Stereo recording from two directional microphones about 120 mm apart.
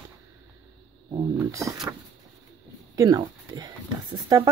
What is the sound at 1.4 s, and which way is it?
Speech, 25° right (ahead or behind).